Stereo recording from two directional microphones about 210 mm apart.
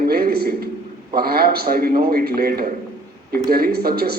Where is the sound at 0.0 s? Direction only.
45° right (ahead or behind).